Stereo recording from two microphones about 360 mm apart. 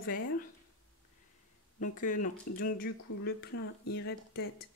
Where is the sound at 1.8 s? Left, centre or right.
Left.